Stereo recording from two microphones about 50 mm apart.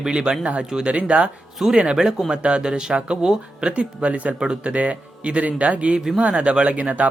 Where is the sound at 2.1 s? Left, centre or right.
Centre.